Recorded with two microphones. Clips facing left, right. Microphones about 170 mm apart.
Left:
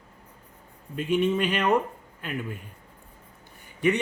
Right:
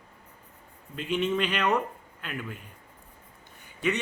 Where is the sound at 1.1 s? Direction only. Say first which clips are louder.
Left 3 dB; 10° left (ahead or behind).